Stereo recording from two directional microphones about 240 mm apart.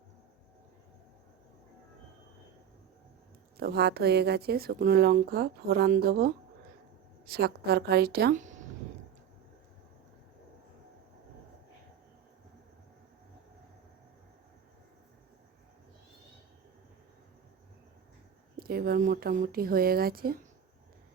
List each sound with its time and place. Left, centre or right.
3.6 s speech: right
18.5 s speech: right